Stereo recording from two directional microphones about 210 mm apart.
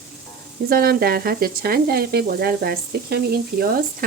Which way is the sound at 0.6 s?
45° right (ahead or behind).